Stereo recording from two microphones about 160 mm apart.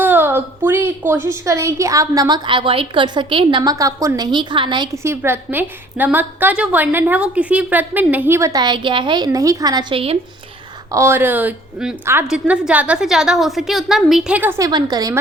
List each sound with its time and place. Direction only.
0.0 s a woman's voice: 15° right (ahead or behind)
5.0 s a woman's voice: 15° right (ahead or behind)
14.7 s a woman's voice: 25° right (ahead or behind)